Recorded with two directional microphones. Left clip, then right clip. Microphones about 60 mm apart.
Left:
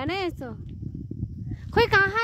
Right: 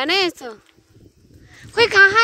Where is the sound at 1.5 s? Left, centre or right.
Centre.